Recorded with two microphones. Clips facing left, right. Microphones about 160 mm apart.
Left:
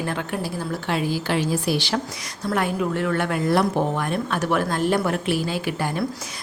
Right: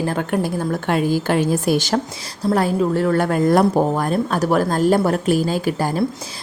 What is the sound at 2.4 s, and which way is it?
A woman's voice, 35° right (ahead or behind).